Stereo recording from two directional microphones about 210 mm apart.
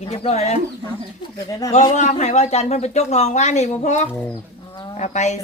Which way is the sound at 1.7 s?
35° left (ahead or behind).